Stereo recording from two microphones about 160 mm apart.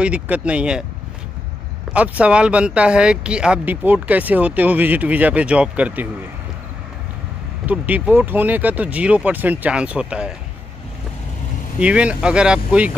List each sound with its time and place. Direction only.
0.0 s speech: 5° right (ahead or behind)
1.9 s speech: 10° right (ahead or behind)
7.6 s speech: 10° right (ahead or behind)
11.8 s speech: 5° right (ahead or behind)